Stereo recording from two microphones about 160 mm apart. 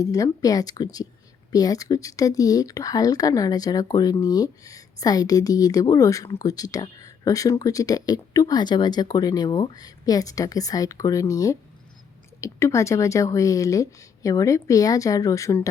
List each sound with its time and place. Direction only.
0.0 s speech: 20° left (ahead or behind)